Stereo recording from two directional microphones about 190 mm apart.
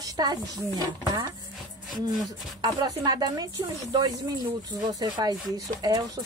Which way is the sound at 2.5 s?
20° right (ahead or behind).